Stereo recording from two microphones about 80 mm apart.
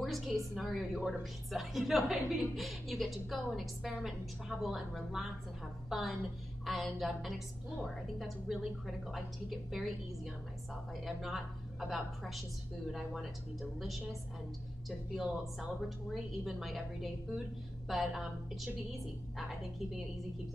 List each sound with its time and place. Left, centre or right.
0.0 s a woman's voice: centre
11.1 s a woman's voice: centre